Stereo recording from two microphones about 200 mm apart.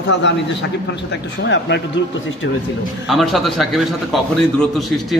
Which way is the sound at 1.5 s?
60° left (ahead or behind).